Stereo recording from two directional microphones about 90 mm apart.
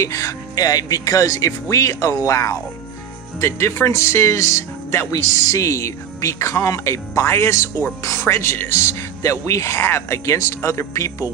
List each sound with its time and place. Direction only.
0.0 s speech: 35° left (ahead or behind)